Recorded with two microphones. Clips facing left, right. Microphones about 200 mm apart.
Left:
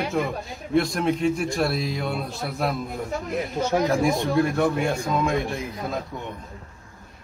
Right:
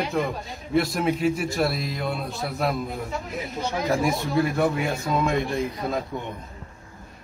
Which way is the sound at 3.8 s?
Centre (ahead or behind).